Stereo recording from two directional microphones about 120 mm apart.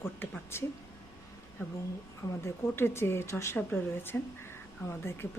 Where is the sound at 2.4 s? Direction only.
20° left (ahead or behind).